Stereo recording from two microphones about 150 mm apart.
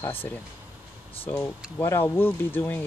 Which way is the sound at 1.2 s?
15° left (ahead or behind).